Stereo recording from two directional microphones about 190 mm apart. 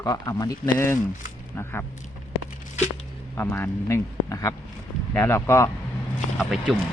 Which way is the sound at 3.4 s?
10° left (ahead or behind).